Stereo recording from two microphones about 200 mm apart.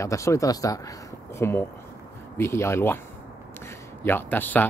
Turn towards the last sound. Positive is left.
turn(degrees=10)  # may be behind; listen again after turning